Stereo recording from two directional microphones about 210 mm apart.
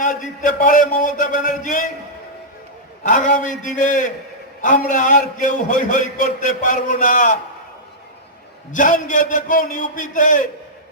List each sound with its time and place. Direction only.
0.0 s a man's voice: 40° left (ahead or behind)
3.0 s a man's voice: 35° left (ahead or behind)
8.7 s a man's voice: 40° left (ahead or behind)